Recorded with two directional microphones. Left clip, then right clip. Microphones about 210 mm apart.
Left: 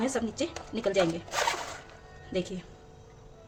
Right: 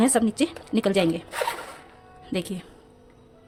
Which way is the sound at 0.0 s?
50° right (ahead or behind).